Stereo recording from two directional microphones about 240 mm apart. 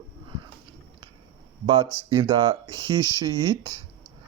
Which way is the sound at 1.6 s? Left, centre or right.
Centre.